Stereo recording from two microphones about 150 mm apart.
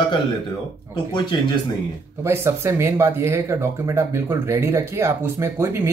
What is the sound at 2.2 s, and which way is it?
Speech, 15° right (ahead or behind).